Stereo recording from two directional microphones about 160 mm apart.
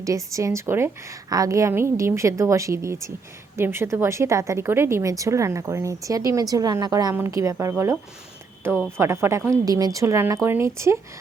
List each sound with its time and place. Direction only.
0.0 s a woman's voice: 20° right (ahead or behind)